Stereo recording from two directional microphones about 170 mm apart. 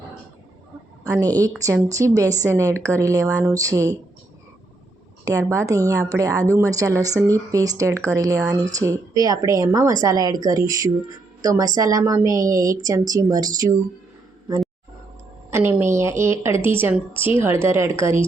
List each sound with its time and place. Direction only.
1.0 s a woman's voice: 20° right (ahead or behind)
5.2 s a woman's voice: 20° right (ahead or behind)
15.4 s a woman's voice: 15° right (ahead or behind)